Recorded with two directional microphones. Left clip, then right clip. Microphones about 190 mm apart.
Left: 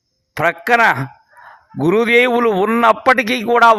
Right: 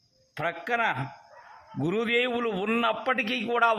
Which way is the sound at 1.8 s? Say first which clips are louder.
Left 14 dB; 40° left (ahead or behind).